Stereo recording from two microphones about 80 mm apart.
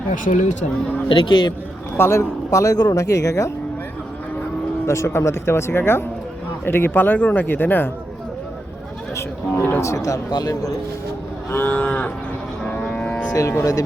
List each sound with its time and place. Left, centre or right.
1.2 s speech: left
2.0 s speech: left
2.7 s speech: left
3.0 s speech: left
4.9 s speech: left
9.1 s speech: left
9.8 s speech: left
11.5 s cattle: left
13.2 s speech: left